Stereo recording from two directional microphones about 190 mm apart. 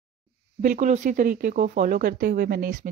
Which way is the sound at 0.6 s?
40° right (ahead or behind).